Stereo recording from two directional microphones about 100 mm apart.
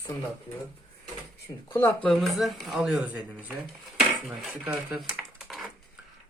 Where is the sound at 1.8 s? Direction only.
20° left (ahead or behind).